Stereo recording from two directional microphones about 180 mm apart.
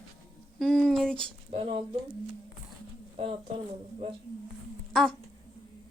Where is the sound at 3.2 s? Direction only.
35° right (ahead or behind).